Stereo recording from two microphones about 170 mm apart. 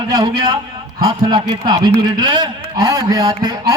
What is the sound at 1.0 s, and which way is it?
A man's voice, 25° right (ahead or behind).